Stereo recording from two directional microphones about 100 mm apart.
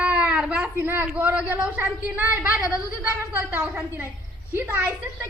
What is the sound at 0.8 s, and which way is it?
Speech, 25° right (ahead or behind).